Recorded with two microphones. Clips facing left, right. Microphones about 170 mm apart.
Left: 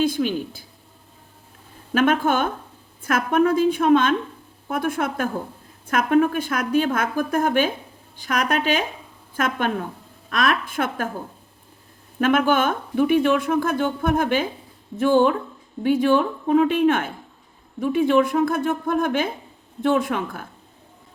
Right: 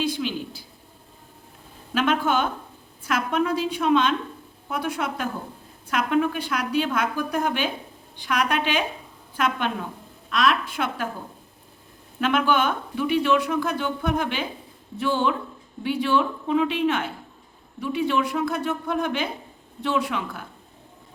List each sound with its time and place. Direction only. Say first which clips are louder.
0.0 s a sound: left 5 dB; 50° left (ahead or behind)
1.9 s speech: left 4 dB; 50° left (ahead or behind)
12.2 s speech: left 3 dB; 50° left (ahead or behind)